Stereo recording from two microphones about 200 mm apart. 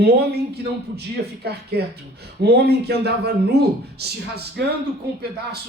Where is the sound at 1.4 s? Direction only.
55° right (ahead or behind).